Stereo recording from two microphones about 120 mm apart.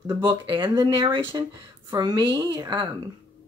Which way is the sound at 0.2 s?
40° right (ahead or behind).